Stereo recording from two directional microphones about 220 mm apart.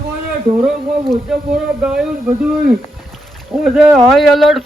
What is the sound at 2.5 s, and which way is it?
Speech, 40° right (ahead or behind).